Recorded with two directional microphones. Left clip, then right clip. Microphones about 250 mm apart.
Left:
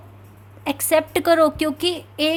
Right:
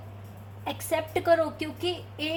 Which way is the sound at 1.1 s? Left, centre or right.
Left.